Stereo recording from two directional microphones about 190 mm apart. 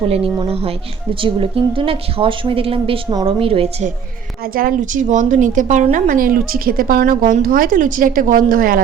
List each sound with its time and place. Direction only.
0.1 s a woman's voice: 30° right (ahead or behind)
4.5 s a woman's voice: 45° right (ahead or behind)